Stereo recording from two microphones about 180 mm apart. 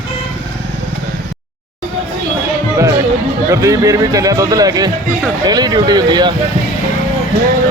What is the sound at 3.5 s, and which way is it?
A man's voice, 15° right (ahead or behind).